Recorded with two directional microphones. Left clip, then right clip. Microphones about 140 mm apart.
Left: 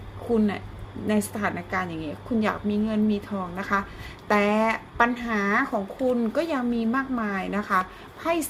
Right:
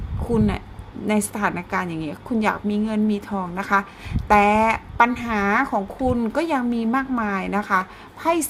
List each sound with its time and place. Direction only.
0.3 s a woman's voice: 45° right (ahead or behind)